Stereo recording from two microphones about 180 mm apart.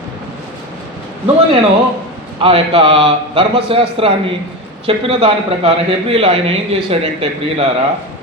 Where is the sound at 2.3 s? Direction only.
30° right (ahead or behind).